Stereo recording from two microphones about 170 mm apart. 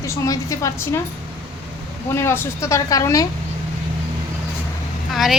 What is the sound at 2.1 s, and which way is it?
Speech, 15° left (ahead or behind).